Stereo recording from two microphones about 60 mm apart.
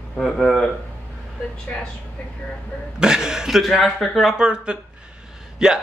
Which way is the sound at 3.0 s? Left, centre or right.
Centre.